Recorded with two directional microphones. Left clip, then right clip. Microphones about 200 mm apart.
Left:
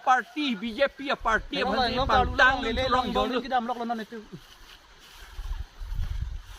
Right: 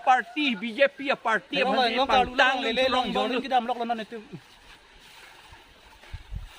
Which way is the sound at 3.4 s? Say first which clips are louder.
Right 2 dB; 40° right (ahead or behind).